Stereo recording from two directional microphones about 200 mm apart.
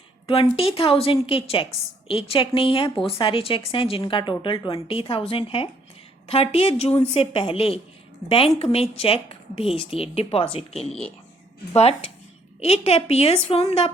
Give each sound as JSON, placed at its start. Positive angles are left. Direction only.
{"t": 0.3, "sound": "a woman's voice", "side_deg": 30}